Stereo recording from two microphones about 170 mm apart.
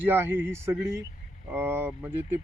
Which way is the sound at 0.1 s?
10° right (ahead or behind).